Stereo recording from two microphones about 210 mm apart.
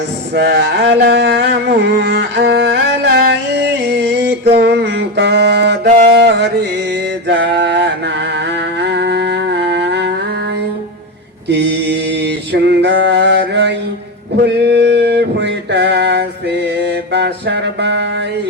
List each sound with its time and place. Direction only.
0.3 s a sound: 55° right (ahead or behind)
0.9 s music: 50° right (ahead or behind)
4.5 s mantra: 55° right (ahead or behind)
8.8 s music: 55° right (ahead or behind)
11.4 s mantra: 55° right (ahead or behind)
14.4 s a sound: 55° right (ahead or behind)
16.8 s music: 55° right (ahead or behind)